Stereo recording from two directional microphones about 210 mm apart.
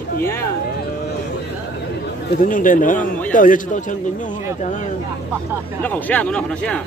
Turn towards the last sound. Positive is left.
turn(degrees=5)  # may be behind; listen again after turning